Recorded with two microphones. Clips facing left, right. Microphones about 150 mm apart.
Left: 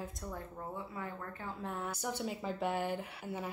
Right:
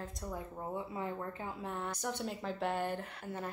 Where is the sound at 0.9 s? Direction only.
25° right (ahead or behind).